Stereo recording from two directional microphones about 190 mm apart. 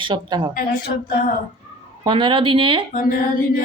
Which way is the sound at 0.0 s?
25° right (ahead or behind).